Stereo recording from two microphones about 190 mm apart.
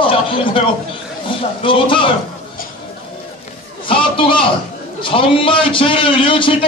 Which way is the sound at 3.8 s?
25° left (ahead or behind).